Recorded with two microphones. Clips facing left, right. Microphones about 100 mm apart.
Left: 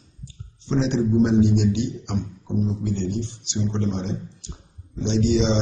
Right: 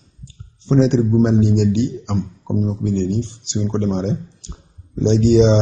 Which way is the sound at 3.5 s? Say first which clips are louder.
Right 5 dB; 50° right (ahead or behind).